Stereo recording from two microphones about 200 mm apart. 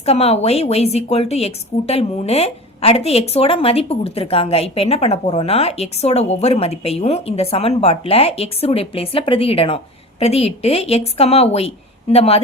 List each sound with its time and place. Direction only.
0.0 s a woman's voice: 30° left (ahead or behind)